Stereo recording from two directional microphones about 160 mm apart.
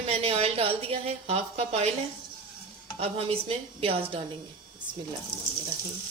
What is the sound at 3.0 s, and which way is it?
Speech, 40° right (ahead or behind).